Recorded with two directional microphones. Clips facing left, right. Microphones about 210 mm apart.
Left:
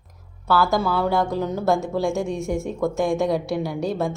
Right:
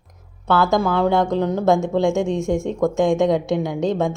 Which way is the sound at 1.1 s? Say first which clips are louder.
Right 4 dB; 20° right (ahead or behind).